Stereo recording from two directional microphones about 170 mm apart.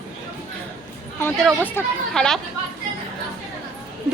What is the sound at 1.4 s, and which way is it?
Speech, 5° left (ahead or behind).